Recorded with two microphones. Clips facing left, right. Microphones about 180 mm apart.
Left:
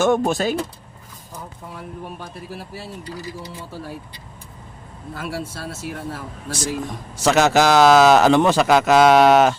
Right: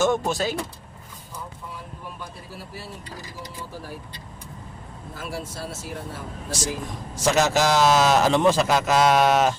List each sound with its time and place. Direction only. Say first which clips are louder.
0.0 s speech: left 4 dB; 55° left (ahead or behind)
5.1 s speech: left 4 dB; 65° left (ahead or behind)